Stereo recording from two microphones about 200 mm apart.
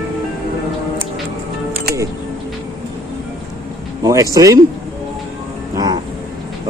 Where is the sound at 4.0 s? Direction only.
15° right (ahead or behind).